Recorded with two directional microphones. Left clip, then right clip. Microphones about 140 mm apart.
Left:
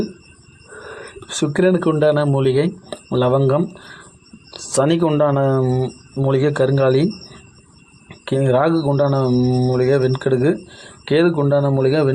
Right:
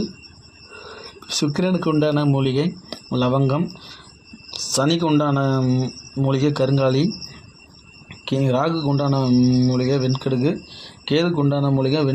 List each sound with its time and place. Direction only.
0.8 s speech: 10° left (ahead or behind)
8.2 s speech: 5° left (ahead or behind)